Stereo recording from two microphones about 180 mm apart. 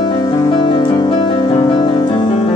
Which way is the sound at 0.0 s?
20° left (ahead or behind).